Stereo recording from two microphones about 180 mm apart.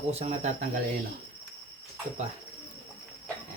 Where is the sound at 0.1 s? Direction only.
40° right (ahead or behind).